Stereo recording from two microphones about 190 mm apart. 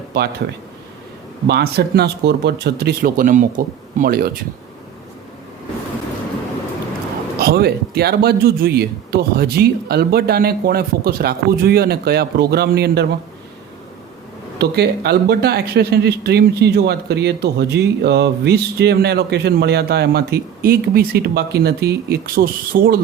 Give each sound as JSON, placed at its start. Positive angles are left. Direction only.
{"t": 0.1, "sound": "speech", "side_deg": -55}
{"t": 1.5, "sound": "speech", "side_deg": -60}
{"t": 7.3, "sound": "speech", "side_deg": -55}
{"t": 14.6, "sound": "speech", "side_deg": -60}